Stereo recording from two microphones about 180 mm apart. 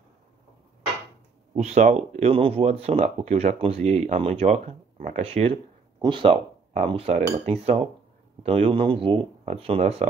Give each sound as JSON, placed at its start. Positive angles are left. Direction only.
{"t": 1.5, "sound": "speech", "side_deg": -35}